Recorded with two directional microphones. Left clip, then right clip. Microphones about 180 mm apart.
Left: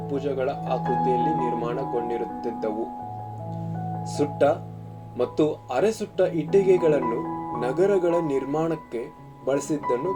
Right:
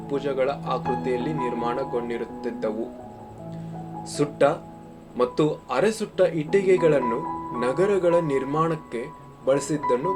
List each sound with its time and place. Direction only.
0.1 s speech: 25° left (ahead or behind)
4.0 s speech: 25° left (ahead or behind)